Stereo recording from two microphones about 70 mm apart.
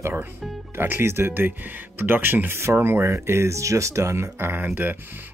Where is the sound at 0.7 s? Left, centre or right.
Right.